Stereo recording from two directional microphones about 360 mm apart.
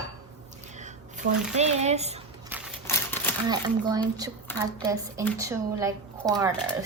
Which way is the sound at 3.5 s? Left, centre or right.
Centre.